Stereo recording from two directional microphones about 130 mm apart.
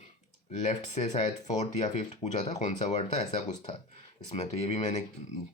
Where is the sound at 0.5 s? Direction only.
65° left (ahead or behind).